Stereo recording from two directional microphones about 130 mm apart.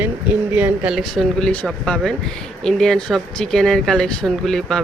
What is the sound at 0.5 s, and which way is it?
Speech, 15° right (ahead or behind).